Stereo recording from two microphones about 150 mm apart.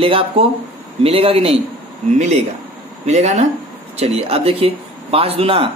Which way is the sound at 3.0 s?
50° right (ahead or behind).